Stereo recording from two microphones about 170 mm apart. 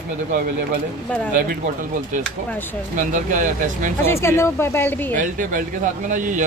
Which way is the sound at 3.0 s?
50° right (ahead or behind).